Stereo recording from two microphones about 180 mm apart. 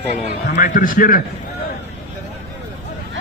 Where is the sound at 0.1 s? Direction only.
45° left (ahead or behind).